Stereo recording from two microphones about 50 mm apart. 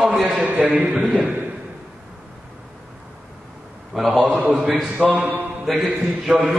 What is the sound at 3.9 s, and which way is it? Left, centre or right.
Speech, centre.